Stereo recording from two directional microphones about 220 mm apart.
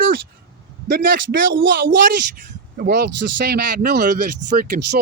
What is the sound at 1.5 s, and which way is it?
Speech, 55° right (ahead or behind).